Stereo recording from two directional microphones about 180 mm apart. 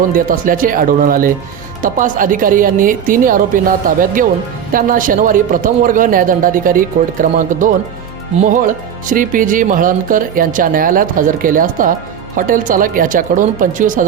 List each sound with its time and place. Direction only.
0.1 s speech: 50° right (ahead or behind)